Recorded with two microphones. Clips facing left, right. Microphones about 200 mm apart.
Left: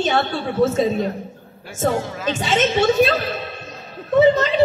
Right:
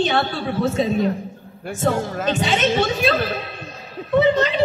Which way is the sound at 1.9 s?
45° right (ahead or behind).